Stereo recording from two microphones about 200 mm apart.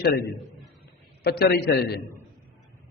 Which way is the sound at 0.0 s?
50° left (ahead or behind).